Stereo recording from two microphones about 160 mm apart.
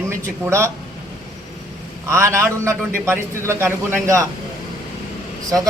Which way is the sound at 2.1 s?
20° right (ahead or behind).